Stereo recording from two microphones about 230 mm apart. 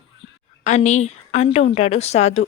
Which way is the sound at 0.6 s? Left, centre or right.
Left.